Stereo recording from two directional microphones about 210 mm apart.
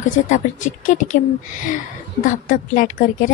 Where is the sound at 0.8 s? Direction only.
40° left (ahead or behind).